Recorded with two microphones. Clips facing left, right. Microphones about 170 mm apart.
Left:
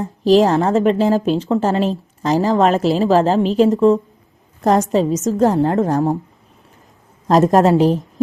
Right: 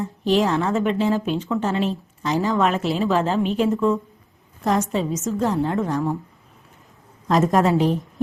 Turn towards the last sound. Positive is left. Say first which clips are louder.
# left 6 dB
turn(degrees=40)  # may be behind; listen again after turning